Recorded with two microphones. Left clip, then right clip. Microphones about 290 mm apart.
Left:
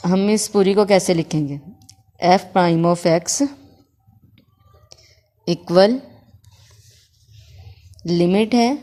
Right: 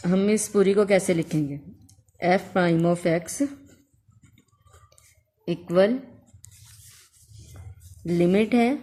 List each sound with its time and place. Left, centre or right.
0.0 s a woman's voice: centre
5.5 s a woman's voice: centre
8.0 s a woman's voice: centre